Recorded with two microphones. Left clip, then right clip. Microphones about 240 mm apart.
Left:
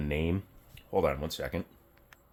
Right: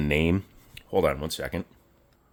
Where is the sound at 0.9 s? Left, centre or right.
Right.